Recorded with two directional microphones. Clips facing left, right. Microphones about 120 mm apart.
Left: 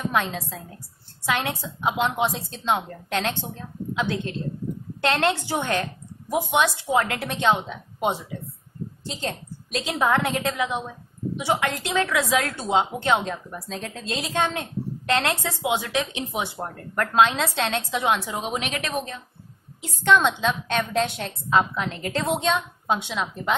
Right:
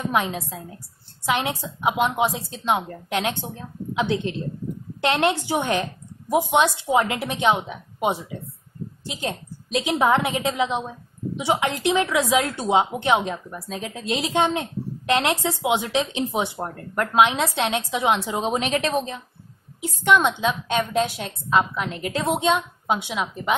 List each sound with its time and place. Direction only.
0.1 s a woman's voice: 15° right (ahead or behind)
10.6 s a woman's voice: 25° right (ahead or behind)
16.4 s a woman's voice: 15° right (ahead or behind)
18.4 s a woman's voice: 35° right (ahead or behind)
19.8 s a woman's voice: 10° right (ahead or behind)
23.2 s speech: centre (ahead or behind)